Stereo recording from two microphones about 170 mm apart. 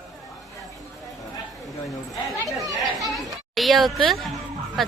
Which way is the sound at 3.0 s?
Centre (ahead or behind).